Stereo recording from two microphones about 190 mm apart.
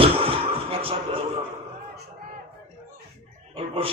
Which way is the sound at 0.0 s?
30° right (ahead or behind).